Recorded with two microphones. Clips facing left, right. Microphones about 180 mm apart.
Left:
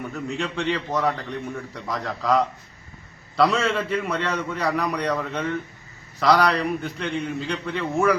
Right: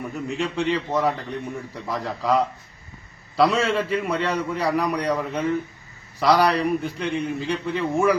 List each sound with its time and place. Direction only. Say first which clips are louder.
0.0 s a man's voice: right 1 dB; 5° right (ahead or behind)